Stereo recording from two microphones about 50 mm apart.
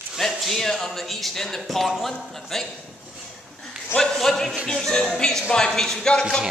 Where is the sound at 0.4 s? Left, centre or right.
Centre.